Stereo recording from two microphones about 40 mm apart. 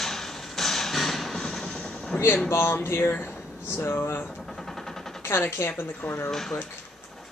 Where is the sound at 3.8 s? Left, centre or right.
Left.